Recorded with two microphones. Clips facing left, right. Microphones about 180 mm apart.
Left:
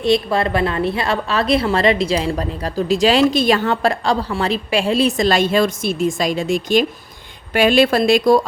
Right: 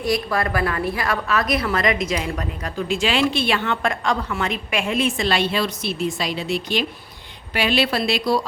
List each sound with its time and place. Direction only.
0.0 s a woman's voice: 25° left (ahead or behind); by 8.4 s 50° left (ahead or behind)